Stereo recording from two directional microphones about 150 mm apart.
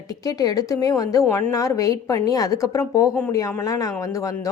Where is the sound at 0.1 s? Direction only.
25° left (ahead or behind).